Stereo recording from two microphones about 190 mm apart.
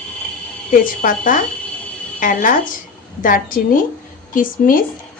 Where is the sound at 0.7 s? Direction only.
45° left (ahead or behind).